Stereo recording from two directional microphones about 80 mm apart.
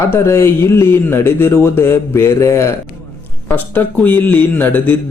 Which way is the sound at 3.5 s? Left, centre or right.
Left.